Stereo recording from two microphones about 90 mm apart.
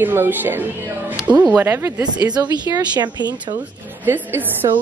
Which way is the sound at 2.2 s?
50° right (ahead or behind).